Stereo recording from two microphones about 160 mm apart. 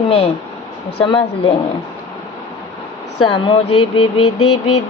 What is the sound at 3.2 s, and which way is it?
A woman's voice, 30° left (ahead or behind).